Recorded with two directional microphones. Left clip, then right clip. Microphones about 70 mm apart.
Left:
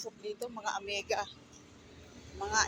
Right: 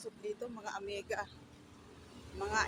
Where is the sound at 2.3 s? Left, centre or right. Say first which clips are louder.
Left 3 dB; right.